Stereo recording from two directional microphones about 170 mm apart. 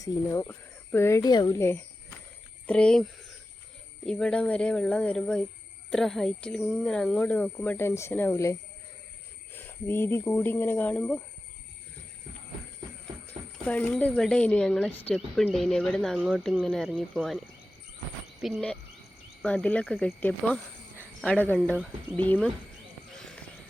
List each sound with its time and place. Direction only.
0.0 s speech: 20° left (ahead or behind)
13.2 s speech: 10° left (ahead or behind)
18.3 s cricket: centre (ahead or behind)
19.4 s speech: 5° left (ahead or behind)
23.1 s clip-clop: 5° left (ahead or behind)